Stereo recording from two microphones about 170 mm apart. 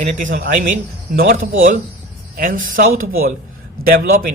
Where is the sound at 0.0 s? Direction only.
50° right (ahead or behind).